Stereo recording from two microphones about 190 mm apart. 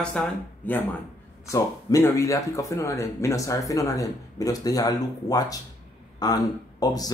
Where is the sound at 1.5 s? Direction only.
15° left (ahead or behind).